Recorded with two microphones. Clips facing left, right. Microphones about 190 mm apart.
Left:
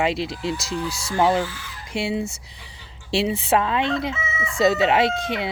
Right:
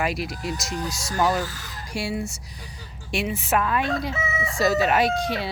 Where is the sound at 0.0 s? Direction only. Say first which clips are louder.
Left 4 dB; 25° left (ahead or behind).